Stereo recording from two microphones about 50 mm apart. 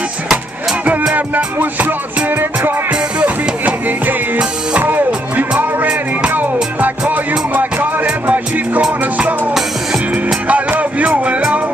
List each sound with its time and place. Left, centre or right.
1.1 s music: right
2.9 s music: right
4.8 s music: right
10.5 s music: right